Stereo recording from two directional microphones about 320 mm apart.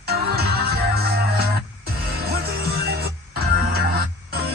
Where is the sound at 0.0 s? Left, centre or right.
Right.